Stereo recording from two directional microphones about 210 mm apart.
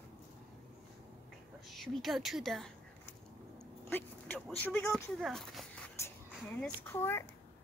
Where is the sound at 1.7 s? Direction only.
Centre (ahead or behind).